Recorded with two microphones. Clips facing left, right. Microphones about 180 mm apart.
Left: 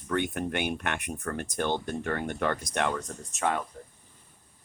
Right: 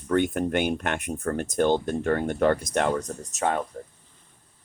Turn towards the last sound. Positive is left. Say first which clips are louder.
# right 3 dB
turn(degrees=-40)  # may be behind; listen again after turning